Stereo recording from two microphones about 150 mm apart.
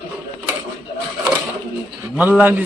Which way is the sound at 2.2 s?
10° right (ahead or behind).